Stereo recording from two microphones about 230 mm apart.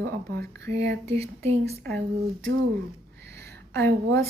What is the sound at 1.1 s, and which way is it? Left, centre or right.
Speech, right.